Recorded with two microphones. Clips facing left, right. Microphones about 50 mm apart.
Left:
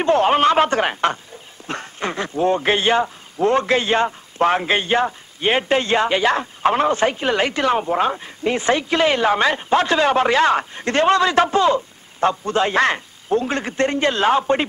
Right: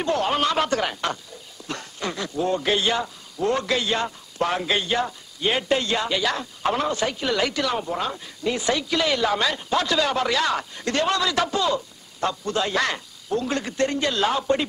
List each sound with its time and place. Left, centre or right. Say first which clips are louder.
0.0 s a man's voice: left 7 dB; left